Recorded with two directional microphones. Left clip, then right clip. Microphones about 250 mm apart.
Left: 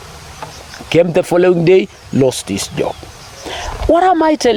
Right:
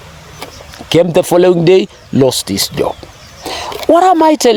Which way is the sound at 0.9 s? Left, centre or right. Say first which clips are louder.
Right 2 dB; right.